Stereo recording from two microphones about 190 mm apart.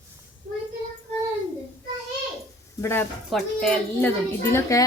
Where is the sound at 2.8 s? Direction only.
10° left (ahead or behind).